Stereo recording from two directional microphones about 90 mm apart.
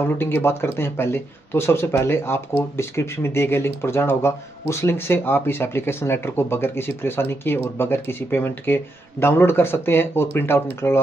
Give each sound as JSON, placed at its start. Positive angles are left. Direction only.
{"t": 0.0, "sound": "speech", "side_deg": 25}